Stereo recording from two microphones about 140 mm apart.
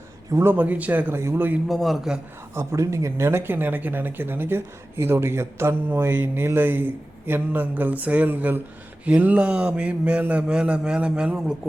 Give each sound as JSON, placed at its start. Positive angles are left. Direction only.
{"t": 0.3, "sound": "speech", "side_deg": -20}
{"t": 1.6, "sound": "a man's voice", "side_deg": 0}
{"t": 2.6, "sound": "speech", "side_deg": -20}